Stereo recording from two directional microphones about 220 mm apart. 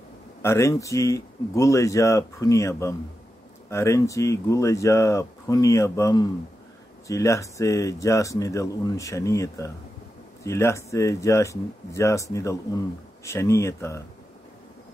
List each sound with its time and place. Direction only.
0.4 s speech: 10° left (ahead or behind)